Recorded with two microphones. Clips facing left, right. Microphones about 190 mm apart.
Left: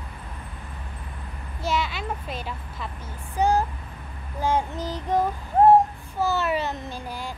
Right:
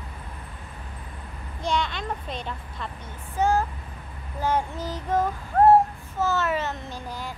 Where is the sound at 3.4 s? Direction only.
15° left (ahead or behind).